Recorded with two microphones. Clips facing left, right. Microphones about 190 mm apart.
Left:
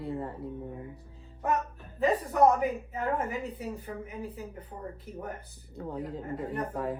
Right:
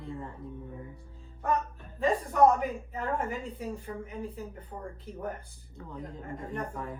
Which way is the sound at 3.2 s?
10° left (ahead or behind).